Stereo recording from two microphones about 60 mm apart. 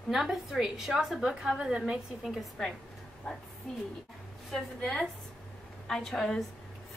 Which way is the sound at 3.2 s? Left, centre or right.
Centre.